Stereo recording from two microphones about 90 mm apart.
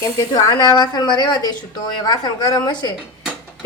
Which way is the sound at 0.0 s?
45° left (ahead or behind).